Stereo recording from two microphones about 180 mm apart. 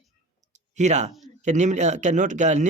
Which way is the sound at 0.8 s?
40° right (ahead or behind).